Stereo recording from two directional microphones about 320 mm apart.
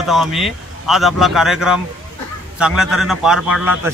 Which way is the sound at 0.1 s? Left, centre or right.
Centre.